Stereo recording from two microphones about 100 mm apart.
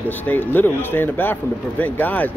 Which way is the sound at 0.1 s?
20° left (ahead or behind).